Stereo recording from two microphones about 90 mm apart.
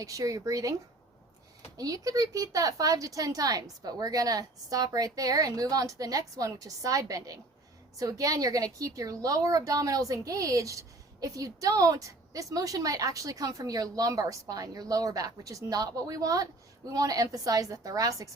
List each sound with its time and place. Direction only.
0.0 s a woman's voice: 40° right (ahead or behind)